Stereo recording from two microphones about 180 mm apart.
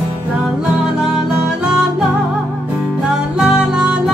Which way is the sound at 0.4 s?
5° right (ahead or behind).